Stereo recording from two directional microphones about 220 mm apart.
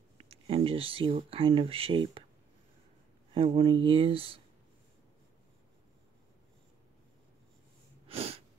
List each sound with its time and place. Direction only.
0.2 s speech: 25° right (ahead or behind)
3.3 s speech: 25° right (ahead or behind)
8.1 s sneeze: 25° right (ahead or behind)